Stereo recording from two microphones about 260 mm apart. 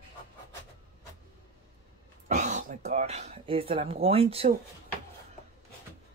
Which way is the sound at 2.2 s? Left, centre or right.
Right.